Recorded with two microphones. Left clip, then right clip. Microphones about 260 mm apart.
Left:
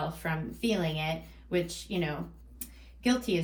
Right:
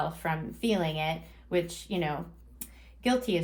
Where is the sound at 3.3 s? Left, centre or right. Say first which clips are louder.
Right 1 dB; right.